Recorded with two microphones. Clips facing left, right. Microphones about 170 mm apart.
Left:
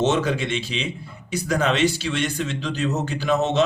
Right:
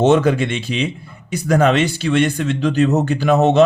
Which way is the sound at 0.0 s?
55° right (ahead or behind).